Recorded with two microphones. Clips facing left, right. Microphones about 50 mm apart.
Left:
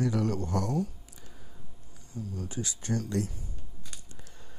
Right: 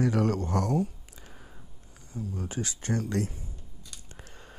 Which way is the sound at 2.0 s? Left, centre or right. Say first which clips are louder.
Right 2 dB; right.